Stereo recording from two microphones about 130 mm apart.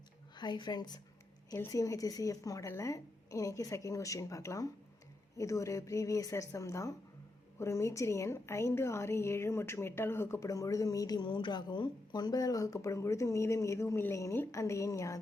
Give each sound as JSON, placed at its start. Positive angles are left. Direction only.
{"t": 0.3, "sound": "a woman's voice", "side_deg": 35}